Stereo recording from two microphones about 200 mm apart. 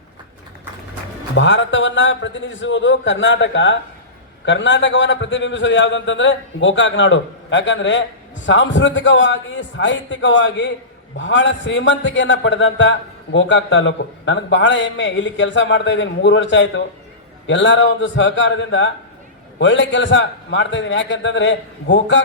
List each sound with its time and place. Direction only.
1.4 s a man's voice: 65° left (ahead or behind)